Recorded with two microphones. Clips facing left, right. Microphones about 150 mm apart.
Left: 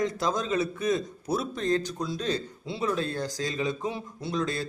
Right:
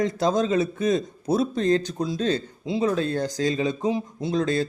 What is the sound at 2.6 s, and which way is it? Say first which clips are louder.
Speech: right 6 dB; 15° right (ahead or behind).